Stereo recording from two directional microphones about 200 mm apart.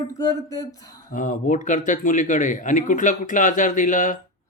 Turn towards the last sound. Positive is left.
turn(degrees=40)  # may be behind; listen again after turning